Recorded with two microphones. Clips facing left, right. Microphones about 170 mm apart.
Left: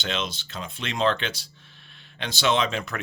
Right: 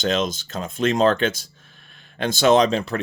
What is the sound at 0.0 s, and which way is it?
Speech, 45° right (ahead or behind).